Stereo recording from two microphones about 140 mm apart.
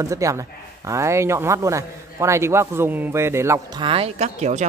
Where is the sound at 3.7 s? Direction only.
40° right (ahead or behind); by 4.7 s 55° right (ahead or behind).